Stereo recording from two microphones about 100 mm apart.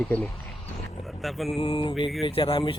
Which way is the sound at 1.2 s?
Centre (ahead or behind).